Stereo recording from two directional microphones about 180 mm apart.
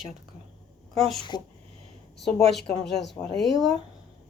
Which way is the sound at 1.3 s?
25° left (ahead or behind).